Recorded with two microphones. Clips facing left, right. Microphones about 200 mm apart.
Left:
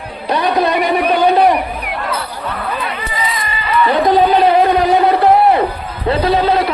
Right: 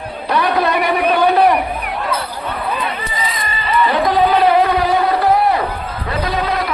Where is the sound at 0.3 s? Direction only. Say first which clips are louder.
Left 2 dB; 20° left (ahead or behind).